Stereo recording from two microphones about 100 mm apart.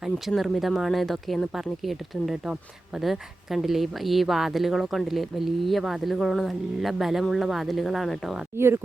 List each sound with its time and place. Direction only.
0.0 s speech: centre (ahead or behind)
8.5 s speech: 25° right (ahead or behind)